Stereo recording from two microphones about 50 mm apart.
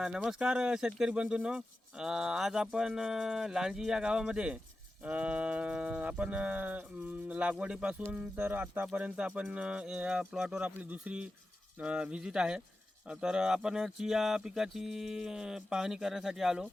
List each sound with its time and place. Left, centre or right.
0.3 s speech: centre
8.4 s speech: right
8.9 s speech: right
10.6 s speech: right
10.9 s speech: right